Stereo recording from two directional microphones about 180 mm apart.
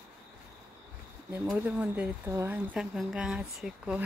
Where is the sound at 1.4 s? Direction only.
5° right (ahead or behind).